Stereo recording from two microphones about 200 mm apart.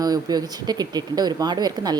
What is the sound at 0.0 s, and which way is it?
A woman's voice, 20° right (ahead or behind).